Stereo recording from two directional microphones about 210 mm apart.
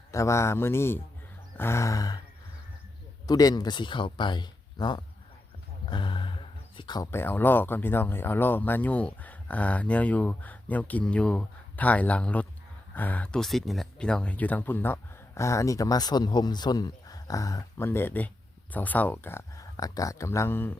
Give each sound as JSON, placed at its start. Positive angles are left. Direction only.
{"t": 0.1, "sound": "speech", "side_deg": 15}
{"t": 3.2, "sound": "speech", "side_deg": 20}